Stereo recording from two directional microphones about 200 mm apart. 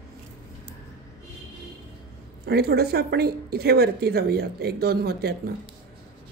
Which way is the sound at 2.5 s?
55° right (ahead or behind).